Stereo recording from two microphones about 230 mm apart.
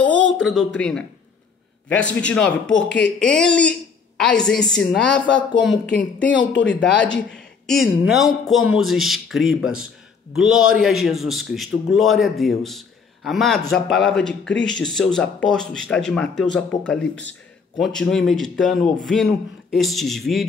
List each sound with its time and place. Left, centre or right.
0.0 s a sound: centre
0.7 s a man's voice: centre
6.3 s speech: left
6.7 s a man's voice: centre